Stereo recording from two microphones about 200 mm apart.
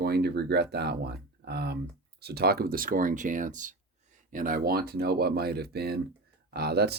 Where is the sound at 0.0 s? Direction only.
50° right (ahead or behind).